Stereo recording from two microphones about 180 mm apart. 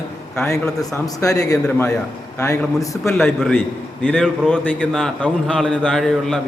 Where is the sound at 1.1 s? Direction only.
20° left (ahead or behind).